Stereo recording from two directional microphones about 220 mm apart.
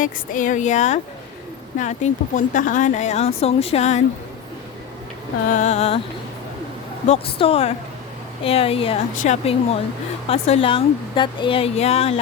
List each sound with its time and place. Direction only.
0.0 s speech: 35° left (ahead or behind)
5.5 s speech: 35° left (ahead or behind)
7.1 s speech: 25° left (ahead or behind)